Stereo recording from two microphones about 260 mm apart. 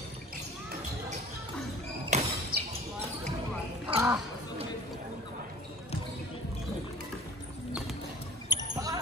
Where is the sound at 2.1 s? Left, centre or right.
Right.